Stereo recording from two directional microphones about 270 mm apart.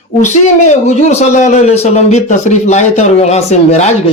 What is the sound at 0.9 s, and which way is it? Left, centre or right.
Speech, left.